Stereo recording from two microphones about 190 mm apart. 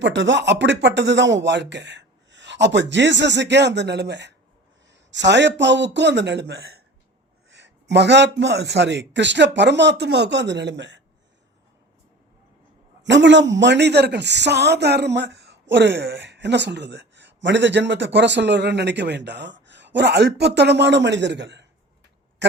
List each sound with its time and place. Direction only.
0.0 s speech: 75° right (ahead or behind)
13.0 s a man's voice: 70° right (ahead or behind)